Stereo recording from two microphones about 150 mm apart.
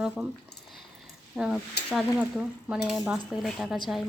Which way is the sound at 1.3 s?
5° right (ahead or behind).